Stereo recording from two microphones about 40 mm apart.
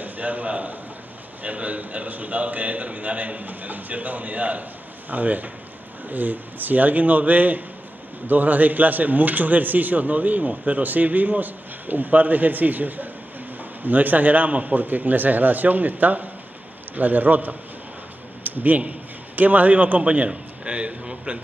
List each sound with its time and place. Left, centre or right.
0.0 s a man's voice: right